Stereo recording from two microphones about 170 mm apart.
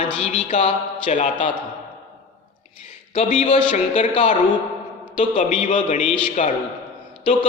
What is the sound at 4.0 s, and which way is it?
Speech, 45° left (ahead or behind).